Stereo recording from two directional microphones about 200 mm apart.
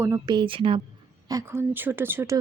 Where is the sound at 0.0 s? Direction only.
15° right (ahead or behind).